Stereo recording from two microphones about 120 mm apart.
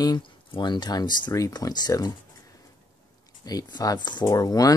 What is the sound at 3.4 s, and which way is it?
Speech, 30° left (ahead or behind).